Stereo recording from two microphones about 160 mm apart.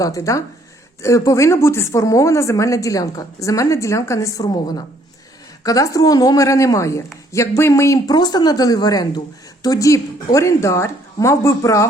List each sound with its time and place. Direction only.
0.0 s speech: 20° left (ahead or behind)